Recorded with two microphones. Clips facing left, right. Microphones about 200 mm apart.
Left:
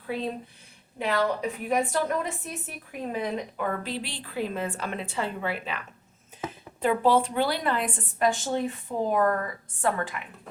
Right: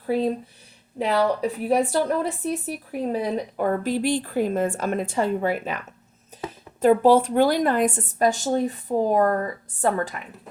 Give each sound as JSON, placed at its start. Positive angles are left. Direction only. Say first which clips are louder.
{"t": 0.0, "sound": "a woman's voice", "louder": "right 8 dB", "side_deg": -40}
{"t": 6.3, "sound": "a sound", "louder": "right 2 dB", "side_deg": -40}
{"t": 6.8, "sound": "speech", "louder": "right 6 dB", "side_deg": -45}